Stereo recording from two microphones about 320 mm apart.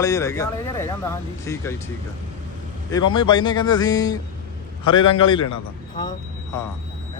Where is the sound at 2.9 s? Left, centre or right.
Centre.